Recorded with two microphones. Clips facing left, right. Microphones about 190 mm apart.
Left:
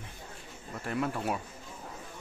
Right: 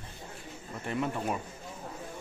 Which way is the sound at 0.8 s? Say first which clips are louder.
Even; centre (ahead or behind).